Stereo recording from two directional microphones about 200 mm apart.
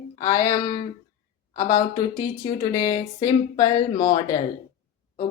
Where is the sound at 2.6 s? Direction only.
20° left (ahead or behind).